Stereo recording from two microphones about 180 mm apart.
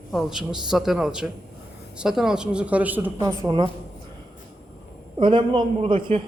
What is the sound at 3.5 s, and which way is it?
Speech, 25° right (ahead or behind).